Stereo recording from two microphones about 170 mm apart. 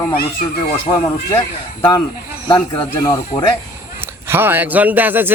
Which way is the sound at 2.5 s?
25° left (ahead or behind).